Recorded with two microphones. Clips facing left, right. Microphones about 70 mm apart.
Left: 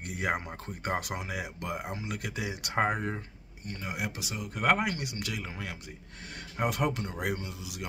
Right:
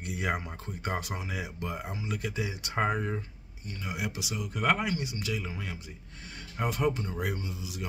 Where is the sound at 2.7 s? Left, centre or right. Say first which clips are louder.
Left 1 dB; left.